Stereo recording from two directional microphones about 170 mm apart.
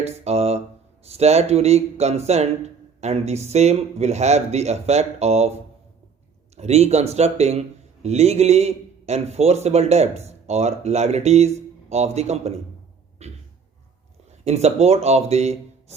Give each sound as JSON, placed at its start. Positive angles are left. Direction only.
{"t": 0.0, "sound": "mantra", "side_deg": -35}
{"t": 1.0, "sound": "a man's voice", "side_deg": -40}
{"t": 6.6, "sound": "a man's voice", "side_deg": -40}
{"t": 13.2, "sound": "a sound", "side_deg": -40}
{"t": 14.3, "sound": "speech", "side_deg": -40}